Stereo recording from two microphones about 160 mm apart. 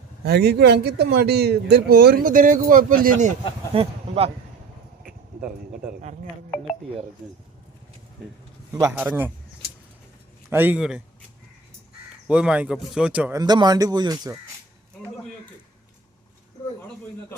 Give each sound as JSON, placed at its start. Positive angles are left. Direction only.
{"t": 0.3, "sound": "speech", "side_deg": -85}
{"t": 3.8, "sound": "speech", "side_deg": -40}
{"t": 8.7, "sound": "speech", "side_deg": -20}
{"t": 10.5, "sound": "speech", "side_deg": -10}
{"t": 12.3, "sound": "speech", "side_deg": -5}
{"t": 13.3, "sound": "speech", "side_deg": -25}